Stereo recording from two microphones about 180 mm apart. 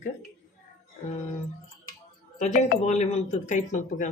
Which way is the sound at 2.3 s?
40° left (ahead or behind).